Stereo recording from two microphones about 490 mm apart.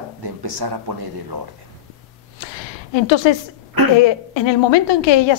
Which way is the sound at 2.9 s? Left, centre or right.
Left.